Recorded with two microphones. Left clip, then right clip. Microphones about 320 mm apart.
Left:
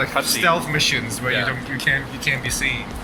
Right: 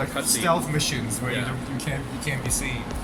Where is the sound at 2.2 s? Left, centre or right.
Centre.